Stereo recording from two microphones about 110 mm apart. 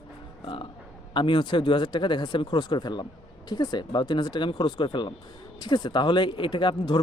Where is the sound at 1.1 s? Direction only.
50° left (ahead or behind).